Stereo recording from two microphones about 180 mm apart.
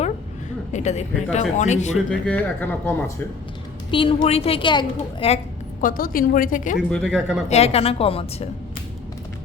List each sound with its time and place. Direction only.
0.7 s a woman's voice: 40° left (ahead or behind)
2.0 s speech: 5° left (ahead or behind)
3.9 s a woman's voice: 30° left (ahead or behind)
5.8 s a woman's voice: 55° left (ahead or behind)
6.9 s speech: centre (ahead or behind)
7.5 s a woman's voice: 35° left (ahead or behind)